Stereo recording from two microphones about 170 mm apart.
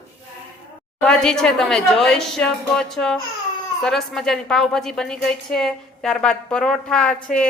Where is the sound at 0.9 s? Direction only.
5° left (ahead or behind).